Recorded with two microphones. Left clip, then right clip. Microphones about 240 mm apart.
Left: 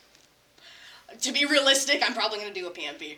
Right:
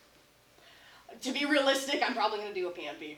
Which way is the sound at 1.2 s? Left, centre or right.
Left.